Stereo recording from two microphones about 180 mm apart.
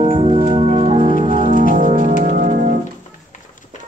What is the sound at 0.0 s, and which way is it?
Music, 30° right (ahead or behind).